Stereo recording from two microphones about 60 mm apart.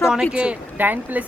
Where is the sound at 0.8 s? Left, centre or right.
Right.